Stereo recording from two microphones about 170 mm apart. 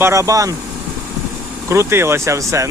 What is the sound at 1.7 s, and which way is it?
Speech, 15° right (ahead or behind).